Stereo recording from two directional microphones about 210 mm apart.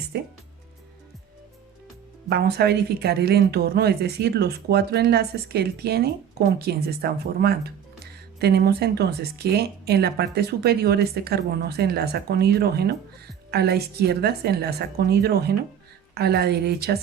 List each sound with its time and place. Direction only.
0.1 s speech: 50° right (ahead or behind)
2.3 s speech: 50° right (ahead or behind)